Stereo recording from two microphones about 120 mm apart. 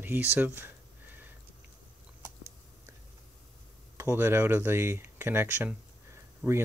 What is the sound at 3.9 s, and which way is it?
Speech, 20° right (ahead or behind).